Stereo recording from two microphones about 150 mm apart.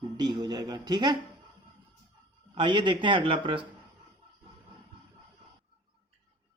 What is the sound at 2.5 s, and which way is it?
Speech, 30° right (ahead or behind).